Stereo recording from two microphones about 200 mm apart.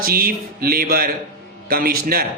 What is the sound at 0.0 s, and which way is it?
A man's voice, 50° right (ahead or behind).